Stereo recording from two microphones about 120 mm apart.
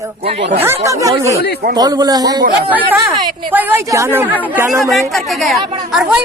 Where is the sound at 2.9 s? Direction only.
15° right (ahead or behind).